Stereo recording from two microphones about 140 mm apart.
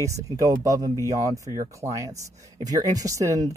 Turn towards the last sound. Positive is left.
turn(degrees=-25)  # may be behind; listen again after turning